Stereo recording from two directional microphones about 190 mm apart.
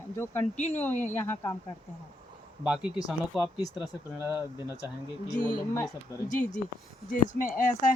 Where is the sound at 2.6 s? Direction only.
5° right (ahead or behind).